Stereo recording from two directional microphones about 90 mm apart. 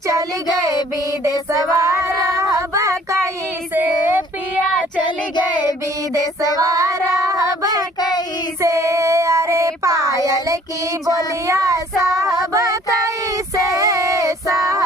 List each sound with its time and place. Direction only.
1.5 s child singing: 35° right (ahead or behind)
5.0 s child singing: 55° left (ahead or behind)
6.6 s child singing: 40° right (ahead or behind)
12.4 s a sound: 40° right (ahead or behind)
13.7 s child singing: 35° right (ahead or behind)